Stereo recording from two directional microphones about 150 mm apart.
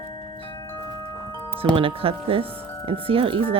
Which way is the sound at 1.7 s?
35° right (ahead or behind).